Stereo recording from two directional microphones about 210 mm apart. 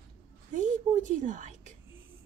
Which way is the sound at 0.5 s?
35° right (ahead or behind).